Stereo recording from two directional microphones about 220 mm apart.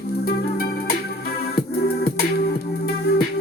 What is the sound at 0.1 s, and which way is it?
Music, 45° left (ahead or behind).